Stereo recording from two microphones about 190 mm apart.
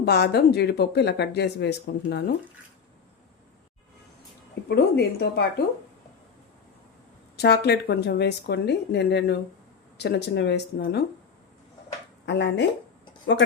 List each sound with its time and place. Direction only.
0.0 s speech: 60° left (ahead or behind)
4.7 s speech: 60° left (ahead or behind)
7.3 s speech: 60° left (ahead or behind)
12.2 s speech: 65° left (ahead or behind)